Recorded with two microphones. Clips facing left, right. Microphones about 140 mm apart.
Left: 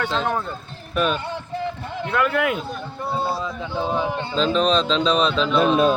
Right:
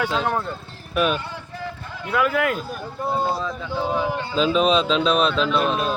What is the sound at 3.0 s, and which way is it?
Speech, 20° right (ahead or behind).